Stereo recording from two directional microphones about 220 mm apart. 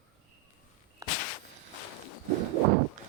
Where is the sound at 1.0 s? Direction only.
15° right (ahead or behind).